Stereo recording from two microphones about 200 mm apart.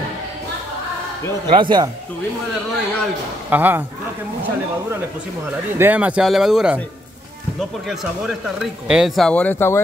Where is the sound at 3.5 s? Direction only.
10° right (ahead or behind).